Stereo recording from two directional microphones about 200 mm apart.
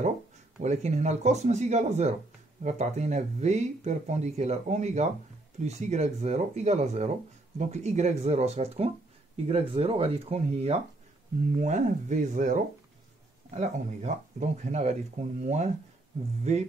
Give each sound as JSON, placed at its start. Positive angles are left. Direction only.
{"t": 0.6, "sound": "speech", "side_deg": -35}